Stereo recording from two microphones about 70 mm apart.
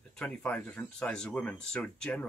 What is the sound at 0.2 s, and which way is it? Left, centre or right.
Speech, centre.